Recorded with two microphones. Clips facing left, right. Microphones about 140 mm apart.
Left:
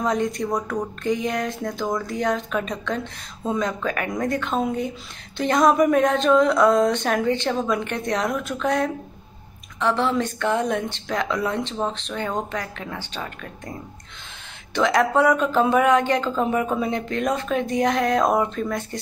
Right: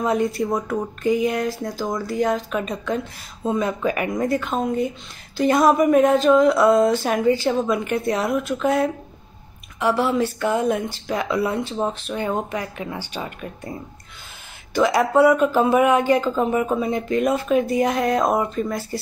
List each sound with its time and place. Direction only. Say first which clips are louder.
0.0 s speech: right 2 dB; 5° right (ahead or behind)